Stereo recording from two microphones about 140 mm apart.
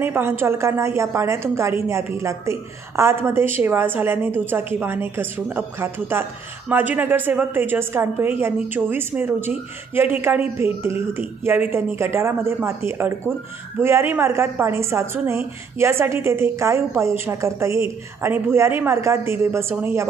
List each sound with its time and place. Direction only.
0.0 s a woman's voice: 15° right (ahead or behind)